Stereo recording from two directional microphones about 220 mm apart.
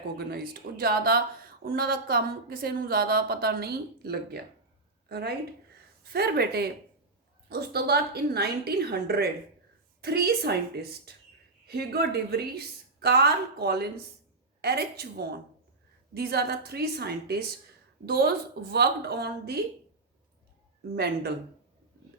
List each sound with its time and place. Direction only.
0.3 s a woman's voice: 45° right (ahead or behind)
20.9 s a woman's voice: 45° right (ahead or behind)